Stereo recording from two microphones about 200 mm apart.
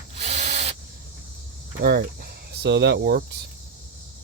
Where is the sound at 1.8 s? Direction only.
55° right (ahead or behind).